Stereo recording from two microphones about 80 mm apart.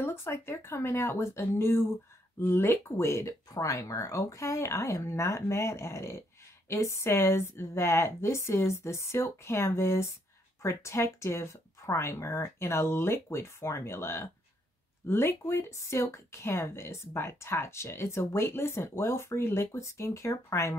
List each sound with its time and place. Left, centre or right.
0.0 s speech: left